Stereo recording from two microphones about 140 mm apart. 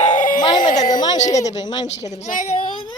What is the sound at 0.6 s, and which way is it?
Speech, 65° left (ahead or behind).